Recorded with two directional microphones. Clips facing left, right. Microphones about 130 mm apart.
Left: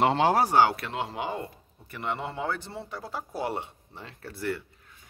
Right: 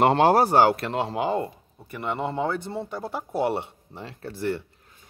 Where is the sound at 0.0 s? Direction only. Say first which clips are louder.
Right 4 dB; 50° right (ahead or behind); by 1.5 s 35° right (ahead or behind).